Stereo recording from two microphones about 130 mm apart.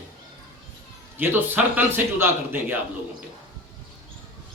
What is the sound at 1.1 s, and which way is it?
A man's voice, 15° right (ahead or behind).